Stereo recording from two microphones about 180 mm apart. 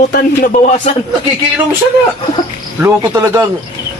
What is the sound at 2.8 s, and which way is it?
Speech, 15° right (ahead or behind).